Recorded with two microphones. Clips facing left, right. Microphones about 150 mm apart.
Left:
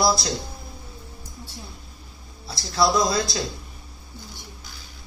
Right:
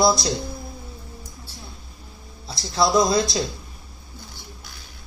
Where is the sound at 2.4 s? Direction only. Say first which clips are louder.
Even; 20° right (ahead or behind).